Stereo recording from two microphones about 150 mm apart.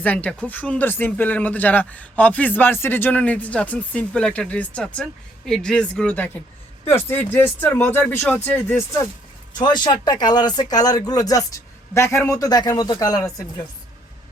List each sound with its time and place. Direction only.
0.0 s speech: 10° left (ahead or behind)
9.6 s speech: 30° left (ahead or behind)